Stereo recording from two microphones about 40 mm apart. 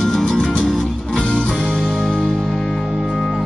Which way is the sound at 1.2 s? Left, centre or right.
Left.